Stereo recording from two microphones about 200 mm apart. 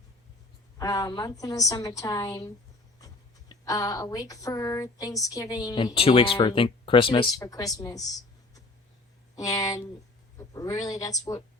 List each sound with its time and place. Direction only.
0.8 s speech: 20° left (ahead or behind)
3.5 s speech: 15° left (ahead or behind)